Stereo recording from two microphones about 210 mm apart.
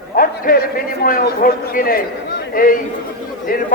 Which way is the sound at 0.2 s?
45° left (ahead or behind).